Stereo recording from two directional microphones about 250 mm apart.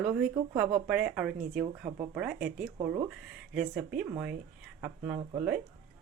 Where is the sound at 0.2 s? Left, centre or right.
Centre.